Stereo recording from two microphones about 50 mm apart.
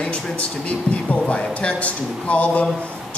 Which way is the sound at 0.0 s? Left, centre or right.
Left.